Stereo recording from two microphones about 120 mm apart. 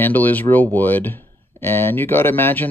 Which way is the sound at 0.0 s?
15° left (ahead or behind).